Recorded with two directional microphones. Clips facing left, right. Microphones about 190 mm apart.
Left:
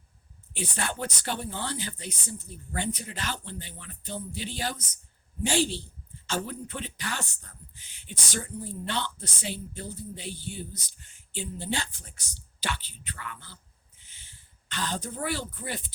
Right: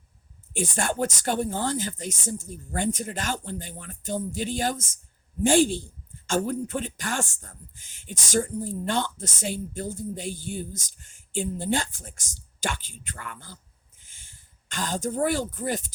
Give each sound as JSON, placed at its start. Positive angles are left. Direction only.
{"t": 0.5, "sound": "speech", "side_deg": -50}